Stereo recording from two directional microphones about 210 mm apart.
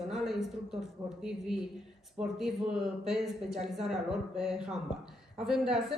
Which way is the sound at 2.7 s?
Centre (ahead or behind).